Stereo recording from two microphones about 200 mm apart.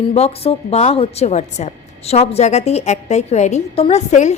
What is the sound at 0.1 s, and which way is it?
A woman's voice, 30° left (ahead or behind).